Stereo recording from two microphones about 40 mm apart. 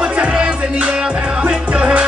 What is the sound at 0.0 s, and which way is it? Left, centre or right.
Music, right.